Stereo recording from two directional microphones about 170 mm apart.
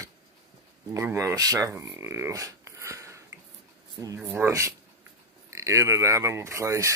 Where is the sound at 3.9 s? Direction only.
20° right (ahead or behind).